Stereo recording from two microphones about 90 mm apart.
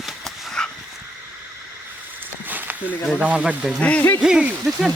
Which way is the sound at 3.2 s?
10° right (ahead or behind).